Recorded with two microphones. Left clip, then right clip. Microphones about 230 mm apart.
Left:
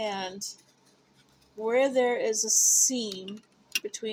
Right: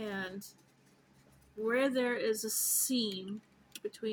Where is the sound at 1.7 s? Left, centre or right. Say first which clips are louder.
Left 7 dB; right.